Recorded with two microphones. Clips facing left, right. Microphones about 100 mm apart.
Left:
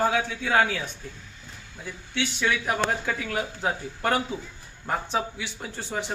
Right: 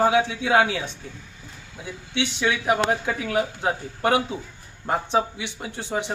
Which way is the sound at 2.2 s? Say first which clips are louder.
Right 2 dB; 20° right (ahead or behind).